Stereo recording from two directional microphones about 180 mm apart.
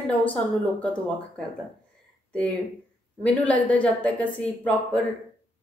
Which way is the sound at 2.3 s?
5° left (ahead or behind).